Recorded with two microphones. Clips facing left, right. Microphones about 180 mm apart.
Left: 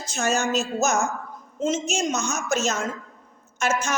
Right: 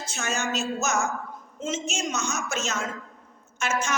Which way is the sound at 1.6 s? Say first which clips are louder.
Left 6 dB; 40° left (ahead or behind).